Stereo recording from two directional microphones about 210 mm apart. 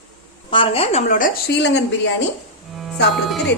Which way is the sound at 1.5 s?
55° left (ahead or behind).